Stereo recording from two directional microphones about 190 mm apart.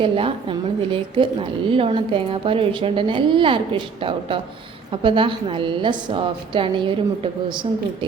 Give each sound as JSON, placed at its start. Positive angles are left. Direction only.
{"t": 0.0, "sound": "a woman's voice", "side_deg": -30}